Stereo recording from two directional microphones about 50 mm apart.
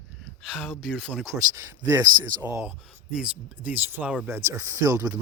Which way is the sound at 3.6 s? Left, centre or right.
Right.